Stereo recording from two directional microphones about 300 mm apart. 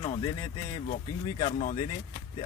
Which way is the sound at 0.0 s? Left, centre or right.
Centre.